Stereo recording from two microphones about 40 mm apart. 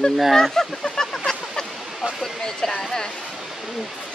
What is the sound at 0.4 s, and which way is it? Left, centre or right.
Goose, centre.